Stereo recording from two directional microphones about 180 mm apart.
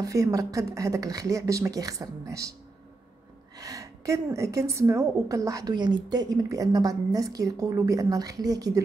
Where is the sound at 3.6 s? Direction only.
20° right (ahead or behind).